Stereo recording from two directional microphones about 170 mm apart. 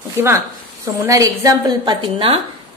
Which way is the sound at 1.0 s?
20° right (ahead or behind).